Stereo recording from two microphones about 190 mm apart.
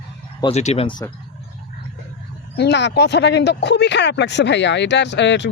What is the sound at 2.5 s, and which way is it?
Speech, 65° left (ahead or behind).